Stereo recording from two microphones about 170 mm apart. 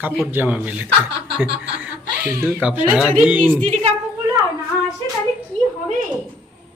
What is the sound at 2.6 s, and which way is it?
Speech, 10° right (ahead or behind).